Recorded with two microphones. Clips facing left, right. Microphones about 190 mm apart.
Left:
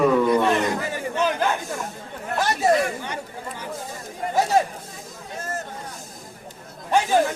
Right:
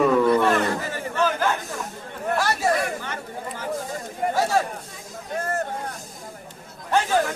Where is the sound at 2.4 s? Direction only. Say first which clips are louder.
Left 4 dB; 20° left (ahead or behind).